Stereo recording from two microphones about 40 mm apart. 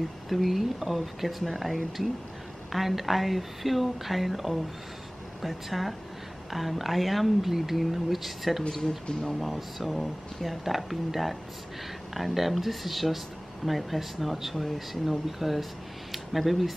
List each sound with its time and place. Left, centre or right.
0.3 s speech: centre
8.8 s speech: centre
9.3 s speech: centre